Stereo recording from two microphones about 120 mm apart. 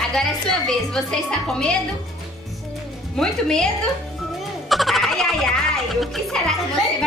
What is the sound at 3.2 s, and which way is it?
Speech, 5° left (ahead or behind).